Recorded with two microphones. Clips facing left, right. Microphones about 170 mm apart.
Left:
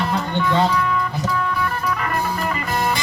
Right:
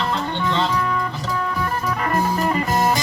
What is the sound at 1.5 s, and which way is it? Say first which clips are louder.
Music: even; 40° right (ahead or behind).